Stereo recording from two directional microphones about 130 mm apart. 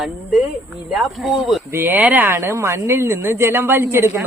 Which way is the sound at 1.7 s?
15° right (ahead or behind).